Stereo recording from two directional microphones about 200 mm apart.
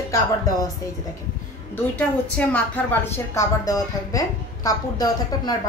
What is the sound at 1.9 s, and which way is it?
A woman's voice, 5° left (ahead or behind).